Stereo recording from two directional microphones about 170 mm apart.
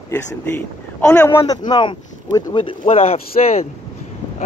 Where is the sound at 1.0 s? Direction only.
10° left (ahead or behind).